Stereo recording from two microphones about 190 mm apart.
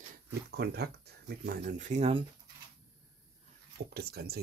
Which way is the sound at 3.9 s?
55° right (ahead or behind).